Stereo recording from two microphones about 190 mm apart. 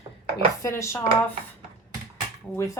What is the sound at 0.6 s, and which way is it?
Speech, 15° left (ahead or behind).